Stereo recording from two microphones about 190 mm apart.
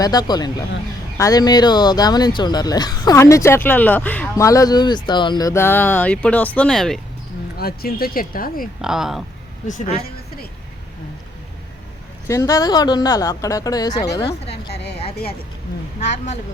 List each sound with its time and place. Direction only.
0.0 s speech: 20° left (ahead or behind); by 7.0 s centre (ahead or behind)
7.6 s speech: 55° left (ahead or behind)
8.8 s speech: 5° right (ahead or behind)
9.6 s speech: 40° left (ahead or behind)
12.3 s speech: 20° left (ahead or behind)
14.7 s a woman's voice: 60° left (ahead or behind)
16.0 s speech: 35° left (ahead or behind)